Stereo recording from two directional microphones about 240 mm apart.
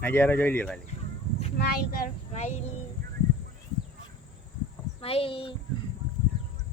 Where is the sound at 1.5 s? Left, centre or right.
Left.